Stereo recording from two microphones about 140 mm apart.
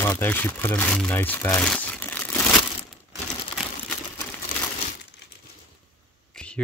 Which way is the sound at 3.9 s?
15° left (ahead or behind).